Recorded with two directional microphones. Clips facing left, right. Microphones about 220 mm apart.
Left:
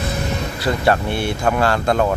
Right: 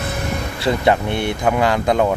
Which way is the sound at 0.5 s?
25° right (ahead or behind).